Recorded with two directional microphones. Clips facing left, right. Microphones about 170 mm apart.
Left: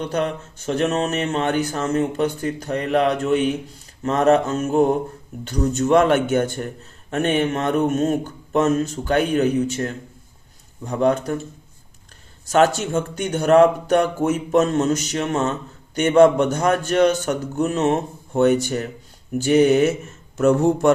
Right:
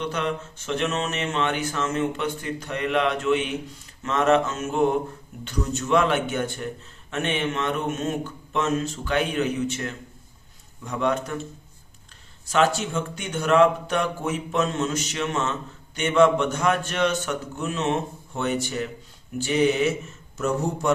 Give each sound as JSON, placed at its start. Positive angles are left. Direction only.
{"t": 0.0, "sound": "speech", "side_deg": 40}
{"t": 12.5, "sound": "speech", "side_deg": 45}